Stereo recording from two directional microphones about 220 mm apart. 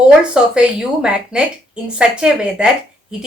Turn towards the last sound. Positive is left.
turn(degrees=-5)  # may be behind; listen again after turning